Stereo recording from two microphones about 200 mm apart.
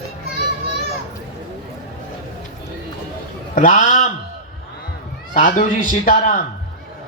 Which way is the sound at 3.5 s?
40° left (ahead or behind).